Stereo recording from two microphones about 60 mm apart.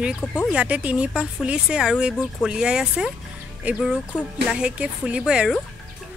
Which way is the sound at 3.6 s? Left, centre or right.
Right.